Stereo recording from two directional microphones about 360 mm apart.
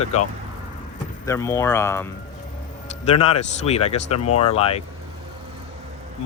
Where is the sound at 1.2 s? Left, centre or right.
Centre.